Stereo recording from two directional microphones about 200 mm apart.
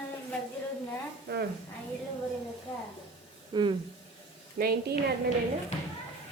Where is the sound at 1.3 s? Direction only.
50° right (ahead or behind).